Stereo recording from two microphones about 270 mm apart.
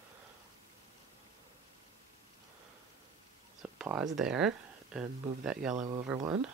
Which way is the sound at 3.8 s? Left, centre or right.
Centre.